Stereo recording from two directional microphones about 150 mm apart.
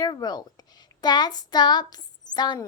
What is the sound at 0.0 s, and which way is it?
A woman's voice, 25° left (ahead or behind).